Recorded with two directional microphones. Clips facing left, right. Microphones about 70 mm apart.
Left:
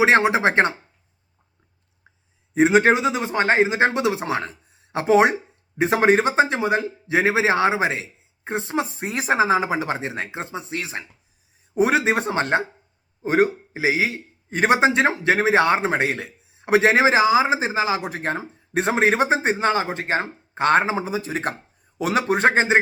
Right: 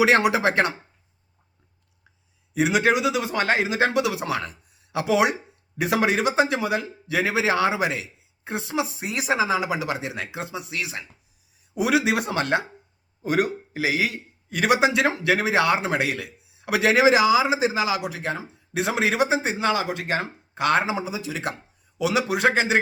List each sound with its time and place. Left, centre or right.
0.0 s speech: left
2.5 s speech: left